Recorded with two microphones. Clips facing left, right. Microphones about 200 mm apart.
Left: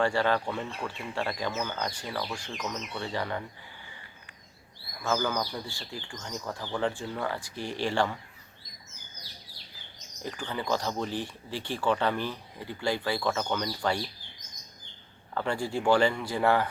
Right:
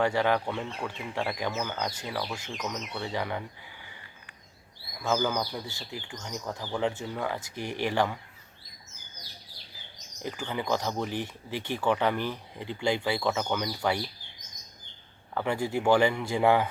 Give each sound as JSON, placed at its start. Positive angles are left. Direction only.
{"t": 0.0, "sound": "speech", "side_deg": -15}
{"t": 5.0, "sound": "speech", "side_deg": -15}
{"t": 10.2, "sound": "speech", "side_deg": -10}
{"t": 15.4, "sound": "speech", "side_deg": -20}